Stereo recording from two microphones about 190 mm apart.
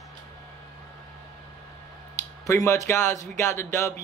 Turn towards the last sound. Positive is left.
turn(degrees=15)  # may be behind; listen again after turning